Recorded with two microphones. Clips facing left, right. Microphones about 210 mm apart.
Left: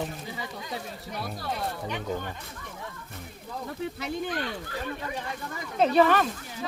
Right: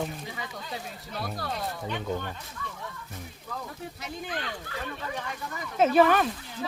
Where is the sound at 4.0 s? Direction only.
65° left (ahead or behind).